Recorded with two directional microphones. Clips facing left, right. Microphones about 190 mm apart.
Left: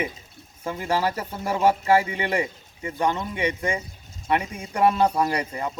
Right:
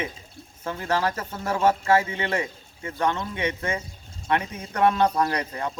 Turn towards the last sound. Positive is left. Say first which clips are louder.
# left 1 dB
turn(degrees=10)  # may be behind; listen again after turning